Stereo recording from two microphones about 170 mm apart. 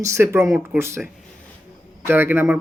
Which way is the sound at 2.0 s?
15° right (ahead or behind).